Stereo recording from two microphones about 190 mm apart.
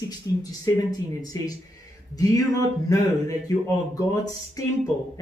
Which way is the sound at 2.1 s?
20° left (ahead or behind).